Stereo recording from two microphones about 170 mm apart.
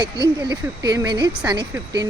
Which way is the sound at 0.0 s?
25° right (ahead or behind).